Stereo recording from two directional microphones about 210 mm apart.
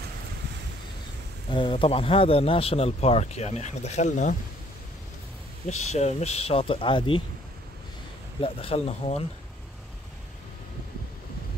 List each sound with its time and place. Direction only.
1.5 s a man's voice: 25° left (ahead or behind)
5.9 s a man's voice: 30° left (ahead or behind)
8.4 s a man's voice: 25° left (ahead or behind)